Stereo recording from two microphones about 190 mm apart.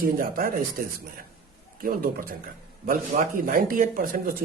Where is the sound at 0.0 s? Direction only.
50° right (ahead or behind).